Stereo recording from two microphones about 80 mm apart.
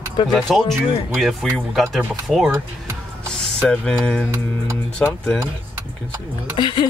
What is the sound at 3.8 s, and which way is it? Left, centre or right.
Speech, centre.